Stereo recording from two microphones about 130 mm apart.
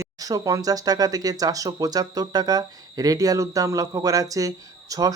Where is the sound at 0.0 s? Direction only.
25° right (ahead or behind).